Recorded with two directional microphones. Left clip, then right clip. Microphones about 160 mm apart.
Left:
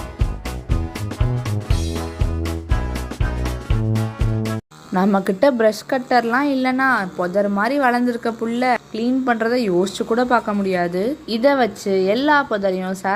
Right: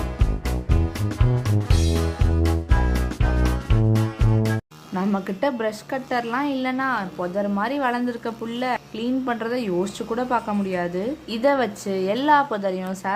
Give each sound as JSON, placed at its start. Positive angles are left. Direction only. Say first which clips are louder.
{"t": 1.7, "sound": "music", "louder": "right 2 dB", "side_deg": 0}
{"t": 5.1, "sound": "a woman's voice", "louder": "left 8 dB", "side_deg": 30}